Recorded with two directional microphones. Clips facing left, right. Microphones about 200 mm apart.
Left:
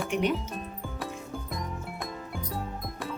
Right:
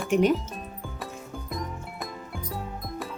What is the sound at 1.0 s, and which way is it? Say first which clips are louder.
Music: left 2 dB; centre (ahead or behind).